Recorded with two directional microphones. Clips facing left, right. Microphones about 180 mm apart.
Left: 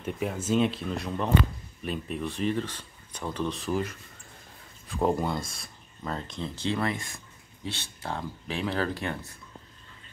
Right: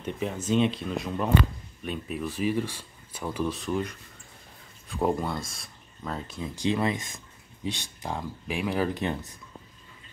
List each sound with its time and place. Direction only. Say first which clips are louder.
0.0 s speech: even; 5° left (ahead or behind); by 9.4 s 20° right (ahead or behind)